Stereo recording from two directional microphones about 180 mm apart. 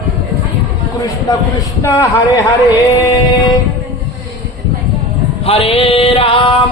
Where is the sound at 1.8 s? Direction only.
15° left (ahead or behind).